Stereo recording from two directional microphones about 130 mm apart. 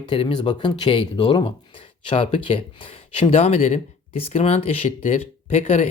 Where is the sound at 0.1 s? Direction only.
40° left (ahead or behind).